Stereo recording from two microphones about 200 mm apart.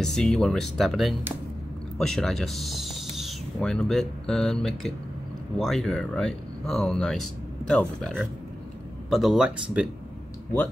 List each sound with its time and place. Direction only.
0.0 s speech: 5° left (ahead or behind)
9.1 s speech: centre (ahead or behind)